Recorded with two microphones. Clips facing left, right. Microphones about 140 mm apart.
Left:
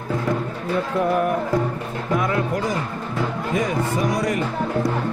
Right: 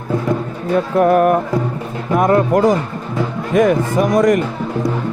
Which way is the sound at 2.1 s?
50° right (ahead or behind).